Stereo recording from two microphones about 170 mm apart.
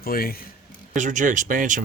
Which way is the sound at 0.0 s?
60° left (ahead or behind).